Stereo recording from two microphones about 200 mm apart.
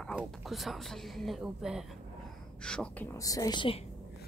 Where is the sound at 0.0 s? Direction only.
5° right (ahead or behind); by 3.8 s 25° left (ahead or behind).